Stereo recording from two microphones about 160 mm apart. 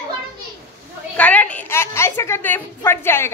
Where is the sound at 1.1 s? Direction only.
10° left (ahead or behind).